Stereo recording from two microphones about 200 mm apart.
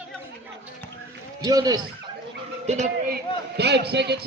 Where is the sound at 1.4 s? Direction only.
20° right (ahead or behind).